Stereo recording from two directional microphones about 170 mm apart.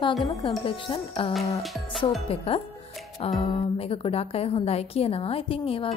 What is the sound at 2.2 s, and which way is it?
A woman's voice, 35° left (ahead or behind).